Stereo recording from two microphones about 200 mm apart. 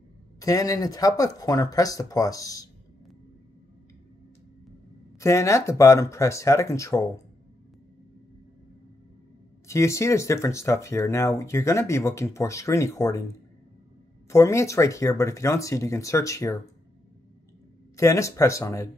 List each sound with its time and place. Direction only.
0.4 s speech: 15° left (ahead or behind)
5.2 s speech: 15° left (ahead or behind)
9.7 s speech: 15° left (ahead or behind)
14.3 s speech: 15° left (ahead or behind)
17.9 s speech: 15° left (ahead or behind)